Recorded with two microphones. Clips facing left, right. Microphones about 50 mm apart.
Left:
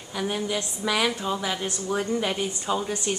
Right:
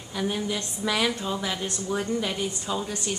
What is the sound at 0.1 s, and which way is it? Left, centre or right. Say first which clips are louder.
A woman's voice: left 1 dB; centre.